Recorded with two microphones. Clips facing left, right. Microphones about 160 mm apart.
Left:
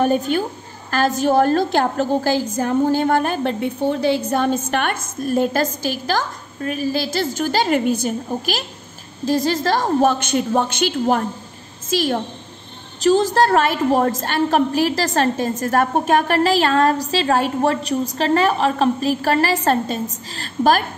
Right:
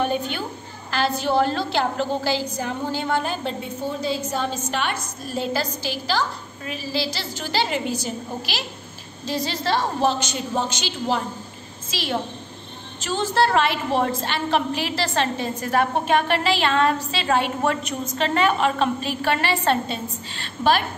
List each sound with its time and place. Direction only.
0.0 s a woman's voice: 45° left (ahead or behind)